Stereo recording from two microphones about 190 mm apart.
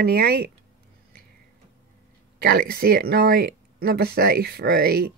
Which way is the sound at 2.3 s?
55° right (ahead or behind).